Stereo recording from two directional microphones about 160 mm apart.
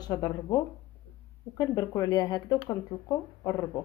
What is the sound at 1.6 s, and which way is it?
Speech, 25° left (ahead or behind).